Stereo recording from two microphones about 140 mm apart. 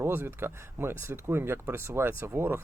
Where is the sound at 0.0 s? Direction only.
15° right (ahead or behind).